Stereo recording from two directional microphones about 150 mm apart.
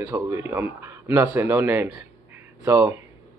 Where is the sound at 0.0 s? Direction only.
20° right (ahead or behind).